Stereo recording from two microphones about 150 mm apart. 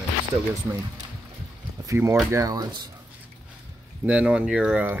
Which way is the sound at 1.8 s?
20° right (ahead or behind).